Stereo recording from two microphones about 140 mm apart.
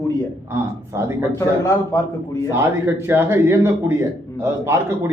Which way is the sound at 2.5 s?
20° right (ahead or behind).